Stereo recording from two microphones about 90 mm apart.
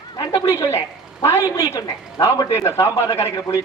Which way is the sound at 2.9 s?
35° left (ahead or behind).